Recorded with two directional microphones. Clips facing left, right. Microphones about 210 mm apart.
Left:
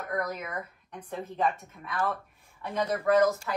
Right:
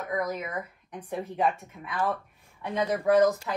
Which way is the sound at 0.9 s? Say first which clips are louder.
Right 3 dB; 15° right (ahead or behind).